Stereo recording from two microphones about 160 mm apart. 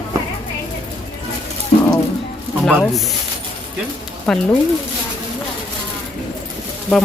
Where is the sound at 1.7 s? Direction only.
50° left (ahead or behind).